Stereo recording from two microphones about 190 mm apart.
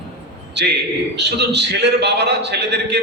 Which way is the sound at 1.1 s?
60° right (ahead or behind).